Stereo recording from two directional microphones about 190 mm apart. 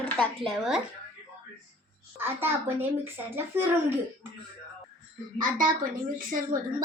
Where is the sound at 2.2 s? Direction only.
10° right (ahead or behind).